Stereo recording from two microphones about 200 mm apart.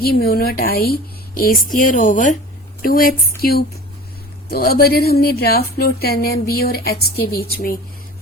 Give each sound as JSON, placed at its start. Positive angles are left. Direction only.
{"t": 0.0, "sound": "a woman's voice", "side_deg": 50}